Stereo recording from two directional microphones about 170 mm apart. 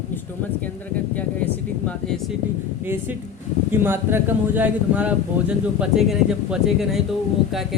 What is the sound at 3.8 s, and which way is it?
Speech, 10° right (ahead or behind).